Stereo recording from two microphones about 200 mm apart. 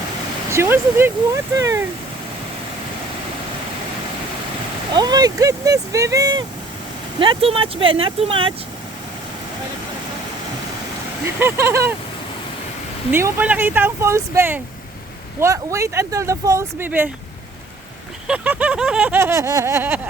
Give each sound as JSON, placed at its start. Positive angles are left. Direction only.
{"t": 0.5, "sound": "speech", "side_deg": -10}
{"t": 4.9, "sound": "speech", "side_deg": -20}
{"t": 11.3, "sound": "speech", "side_deg": -10}
{"t": 13.1, "sound": "speech", "side_deg": -10}
{"t": 18.3, "sound": "speech", "side_deg": -5}